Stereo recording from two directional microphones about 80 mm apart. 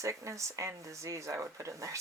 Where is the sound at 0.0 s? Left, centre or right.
Right.